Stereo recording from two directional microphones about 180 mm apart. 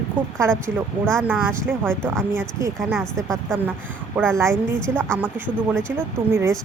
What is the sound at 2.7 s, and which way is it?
Speech, 5° left (ahead or behind).